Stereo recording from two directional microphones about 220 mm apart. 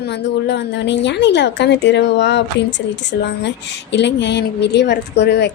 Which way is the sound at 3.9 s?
55° left (ahead or behind).